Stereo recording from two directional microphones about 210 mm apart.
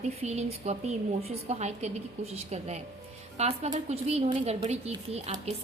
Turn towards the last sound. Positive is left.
turn(degrees=-30)  # may be behind; listen again after turning